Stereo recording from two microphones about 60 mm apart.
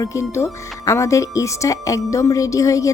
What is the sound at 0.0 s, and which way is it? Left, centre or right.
Speech, left.